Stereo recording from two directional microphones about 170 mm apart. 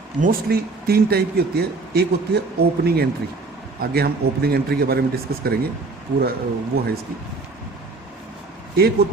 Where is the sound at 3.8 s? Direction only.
65° right (ahead or behind).